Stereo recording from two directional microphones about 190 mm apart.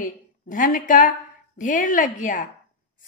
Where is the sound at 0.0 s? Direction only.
45° left (ahead or behind).